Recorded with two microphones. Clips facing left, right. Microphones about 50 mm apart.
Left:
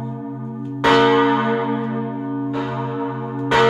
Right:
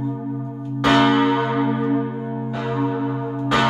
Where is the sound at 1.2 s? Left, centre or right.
Centre.